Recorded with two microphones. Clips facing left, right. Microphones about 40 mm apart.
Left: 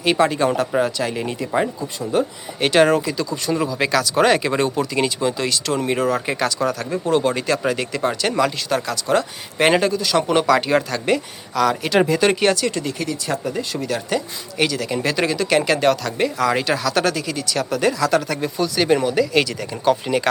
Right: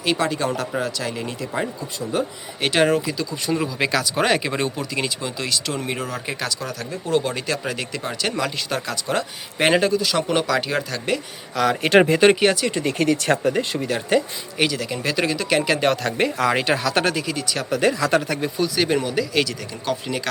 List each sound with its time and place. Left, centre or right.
0.0 s speech: centre
11.5 s speech: centre
11.8 s speech: right
12.4 s speech: centre
12.8 s speech: right
13.7 s speech: centre
14.6 s speech: centre
16.0 s speech: right; by 20.2 s centre